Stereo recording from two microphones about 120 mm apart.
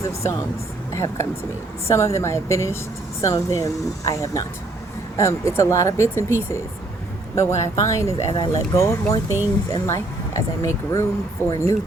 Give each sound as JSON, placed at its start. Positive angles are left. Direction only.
{"t": 0.1, "sound": "speech", "side_deg": 25}